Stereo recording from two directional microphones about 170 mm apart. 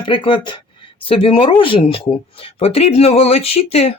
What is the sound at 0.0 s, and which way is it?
Speech, 30° left (ahead or behind).